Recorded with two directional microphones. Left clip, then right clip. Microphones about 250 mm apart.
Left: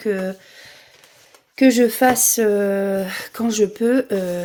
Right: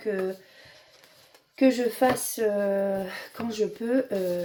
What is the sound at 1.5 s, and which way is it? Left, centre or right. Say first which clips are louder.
Speech: left 8 dB; left.